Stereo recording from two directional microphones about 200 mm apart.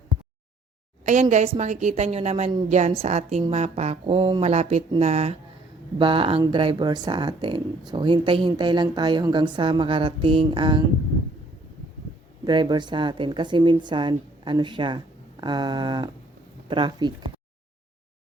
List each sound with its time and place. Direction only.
1.0 s a woman's voice: 35° right (ahead or behind)
12.5 s speech: 20° right (ahead or behind)